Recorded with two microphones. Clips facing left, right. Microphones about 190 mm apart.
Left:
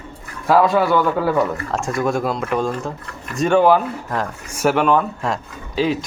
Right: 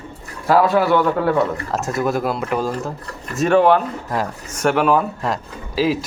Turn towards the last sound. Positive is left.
turn(degrees=-5)  # may be behind; listen again after turning